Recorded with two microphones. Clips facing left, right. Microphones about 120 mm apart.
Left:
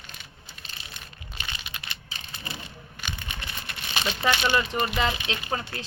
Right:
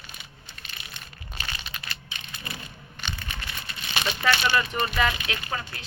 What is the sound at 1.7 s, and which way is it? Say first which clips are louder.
Crushing: right 1 dB; 20° left (ahead or behind).